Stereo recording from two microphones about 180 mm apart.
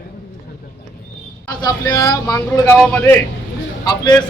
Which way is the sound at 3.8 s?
25° left (ahead or behind).